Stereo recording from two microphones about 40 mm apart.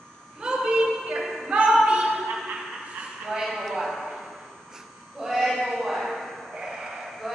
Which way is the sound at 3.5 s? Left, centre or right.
Centre.